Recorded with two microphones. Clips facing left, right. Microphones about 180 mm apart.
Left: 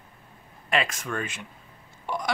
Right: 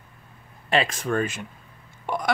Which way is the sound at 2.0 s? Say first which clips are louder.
Right 3 dB; 55° right (ahead or behind).